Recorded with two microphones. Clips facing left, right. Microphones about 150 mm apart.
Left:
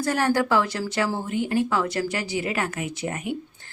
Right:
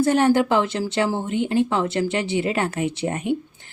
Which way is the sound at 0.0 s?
20° right (ahead or behind).